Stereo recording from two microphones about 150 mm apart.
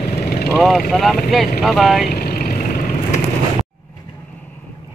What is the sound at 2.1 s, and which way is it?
Vehicle, 85° left.